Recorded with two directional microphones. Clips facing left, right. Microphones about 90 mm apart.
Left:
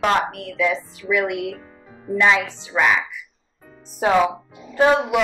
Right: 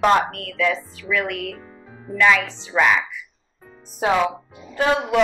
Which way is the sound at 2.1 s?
Centre (ahead or behind).